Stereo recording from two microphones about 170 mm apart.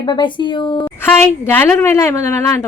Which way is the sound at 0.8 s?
10° left (ahead or behind).